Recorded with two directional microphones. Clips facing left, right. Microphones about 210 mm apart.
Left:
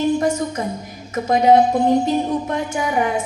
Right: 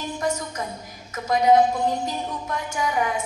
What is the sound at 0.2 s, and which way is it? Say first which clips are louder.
A woman's voice: left 7 dB; 30° left (ahead or behind).